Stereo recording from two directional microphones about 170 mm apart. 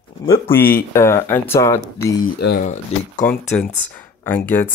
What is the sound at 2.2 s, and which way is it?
Speech, 75° left (ahead or behind).